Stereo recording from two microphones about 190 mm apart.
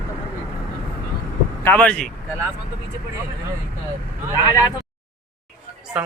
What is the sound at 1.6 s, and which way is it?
Speech, 5° left (ahead or behind).